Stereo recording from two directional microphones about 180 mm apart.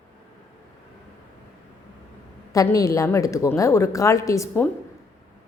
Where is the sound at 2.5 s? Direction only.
20° left (ahead or behind).